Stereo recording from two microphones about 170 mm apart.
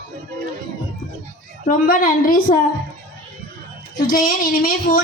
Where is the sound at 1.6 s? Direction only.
50° left (ahead or behind).